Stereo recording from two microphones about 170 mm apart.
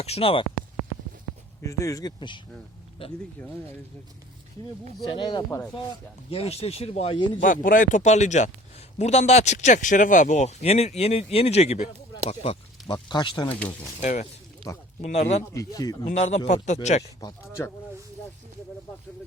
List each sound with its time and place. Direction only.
0.0 s speech: 35° left (ahead or behind)
1.6 s speech: 20° left (ahead or behind)
5.0 s speech: 25° left (ahead or behind)
6.3 s speech: 35° left (ahead or behind)
7.4 s speech: 50° left (ahead or behind); by 13.5 s 25° left (ahead or behind)
13.5 s speech: 10° left (ahead or behind)
14.0 s speech: 45° left (ahead or behind)
14.7 s speech: 20° left (ahead or behind)
15.0 s speech: 40° left (ahead or behind)
15.5 s speech: 20° left (ahead or behind)
16.0 s speech: 40° left (ahead or behind)
17.2 s speech: 20° left (ahead or behind)